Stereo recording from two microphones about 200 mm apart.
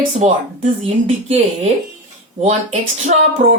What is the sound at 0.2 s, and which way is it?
Speech, 35° right (ahead or behind).